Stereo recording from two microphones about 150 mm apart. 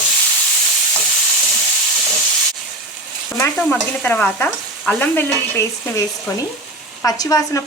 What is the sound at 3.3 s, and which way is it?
Stir, 15° left (ahead or behind).